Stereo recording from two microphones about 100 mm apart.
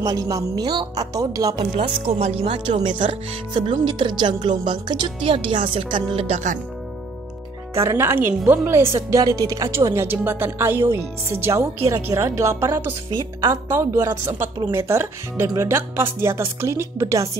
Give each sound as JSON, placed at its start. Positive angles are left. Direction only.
{"t": 0.0, "sound": "speech", "side_deg": -35}
{"t": 1.6, "sound": "speech", "side_deg": -80}
{"t": 2.6, "sound": "speech", "side_deg": -55}
{"t": 5.0, "sound": "speech", "side_deg": -65}
{"t": 7.7, "sound": "speech", "side_deg": -30}
{"t": 9.2, "sound": "speech", "side_deg": -40}